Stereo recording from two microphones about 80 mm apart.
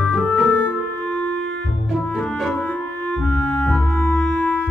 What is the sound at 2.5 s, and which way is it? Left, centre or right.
Music, centre.